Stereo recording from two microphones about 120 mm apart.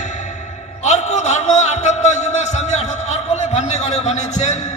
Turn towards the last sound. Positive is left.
turn(degrees=70)  # may be behind; listen again after turning